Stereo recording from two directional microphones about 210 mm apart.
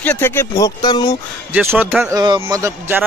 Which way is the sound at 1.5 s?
5° right (ahead or behind).